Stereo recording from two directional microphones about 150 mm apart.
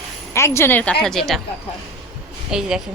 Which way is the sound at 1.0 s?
Centre (ahead or behind).